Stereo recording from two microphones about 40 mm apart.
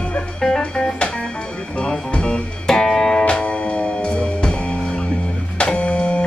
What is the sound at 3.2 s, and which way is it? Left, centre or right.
Music, left.